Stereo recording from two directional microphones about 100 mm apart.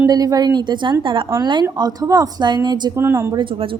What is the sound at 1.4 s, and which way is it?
A woman's voice, 45° right (ahead or behind).